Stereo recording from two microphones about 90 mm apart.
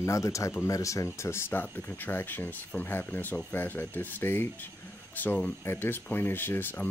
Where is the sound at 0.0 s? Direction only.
35° left (ahead or behind).